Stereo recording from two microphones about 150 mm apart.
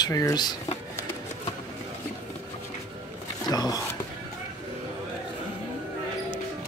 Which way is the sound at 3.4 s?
25° left (ahead or behind).